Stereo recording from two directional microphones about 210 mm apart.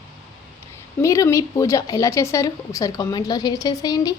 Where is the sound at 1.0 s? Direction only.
15° left (ahead or behind).